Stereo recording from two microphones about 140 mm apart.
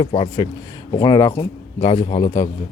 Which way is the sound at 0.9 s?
30° left (ahead or behind).